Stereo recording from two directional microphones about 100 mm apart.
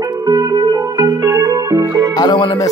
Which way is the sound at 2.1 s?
45° left (ahead or behind).